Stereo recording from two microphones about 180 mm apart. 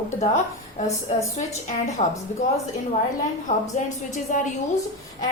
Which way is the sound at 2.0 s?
40° left (ahead or behind).